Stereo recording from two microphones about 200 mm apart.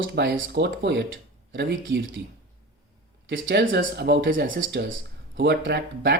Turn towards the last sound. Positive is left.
turn(degrees=-60)  # may be behind; listen again after turning